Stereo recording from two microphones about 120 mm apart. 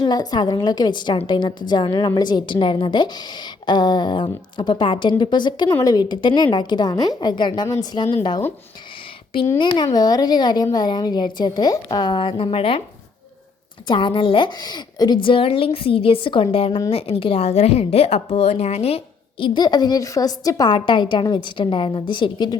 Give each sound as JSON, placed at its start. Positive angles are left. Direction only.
{"t": 0.0, "sound": "a woman's voice", "side_deg": 35}
{"t": 9.6, "sound": "a woman's voice", "side_deg": 40}
{"t": 13.8, "sound": "a woman's voice", "side_deg": 45}
{"t": 19.5, "sound": "a woman's voice", "side_deg": 35}